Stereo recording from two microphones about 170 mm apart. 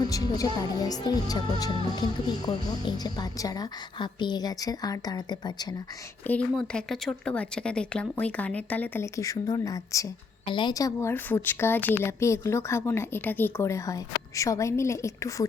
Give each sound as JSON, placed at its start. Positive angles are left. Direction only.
{"t": 0.0, "sound": "a woman's voice", "side_deg": 20}
{"t": 2.5, "sound": "a woman's voice", "side_deg": 25}
{"t": 6.2, "sound": "a woman's voice", "side_deg": 10}